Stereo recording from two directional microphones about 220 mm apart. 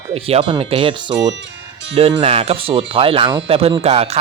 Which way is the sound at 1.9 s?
25° right (ahead or behind).